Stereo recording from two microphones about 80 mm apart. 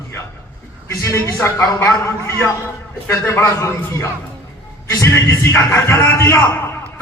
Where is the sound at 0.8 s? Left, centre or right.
Left.